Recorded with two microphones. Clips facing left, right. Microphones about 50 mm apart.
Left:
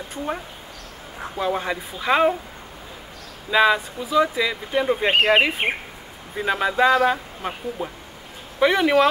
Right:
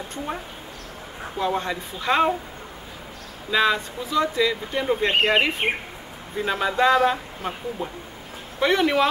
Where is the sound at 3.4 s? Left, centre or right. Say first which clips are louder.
Left 3 dB; centre.